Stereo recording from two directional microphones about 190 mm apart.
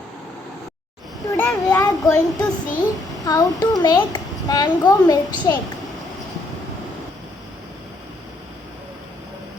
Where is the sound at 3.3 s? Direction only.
20° left (ahead or behind).